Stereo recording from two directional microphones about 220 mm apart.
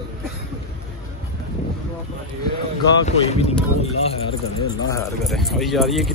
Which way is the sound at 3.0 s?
30° left (ahead or behind).